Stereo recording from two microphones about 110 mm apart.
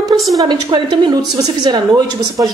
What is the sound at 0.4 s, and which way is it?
A woman's voice, 40° right (ahead or behind).